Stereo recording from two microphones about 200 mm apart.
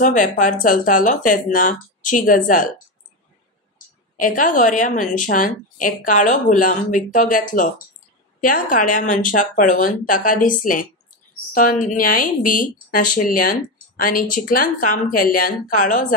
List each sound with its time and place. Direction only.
0.0 s a woman's voice: 40° left (ahead or behind)
4.2 s a woman's voice: 40° left (ahead or behind)